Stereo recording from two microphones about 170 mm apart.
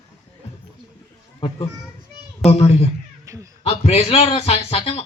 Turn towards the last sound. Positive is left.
turn(degrees=35)  # may be behind; listen again after turning